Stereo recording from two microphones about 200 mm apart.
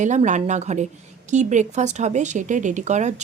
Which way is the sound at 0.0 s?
35° right (ahead or behind).